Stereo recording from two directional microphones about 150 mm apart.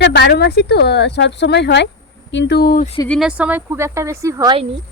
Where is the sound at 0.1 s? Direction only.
90° left.